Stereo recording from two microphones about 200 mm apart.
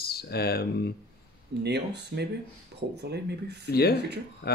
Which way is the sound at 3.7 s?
50° left (ahead or behind).